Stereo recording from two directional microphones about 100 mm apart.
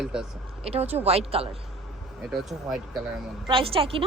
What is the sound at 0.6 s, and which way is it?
Speech, 85° right.